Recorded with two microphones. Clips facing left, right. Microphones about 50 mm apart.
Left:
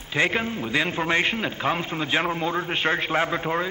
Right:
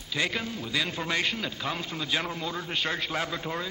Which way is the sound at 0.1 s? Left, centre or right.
Left.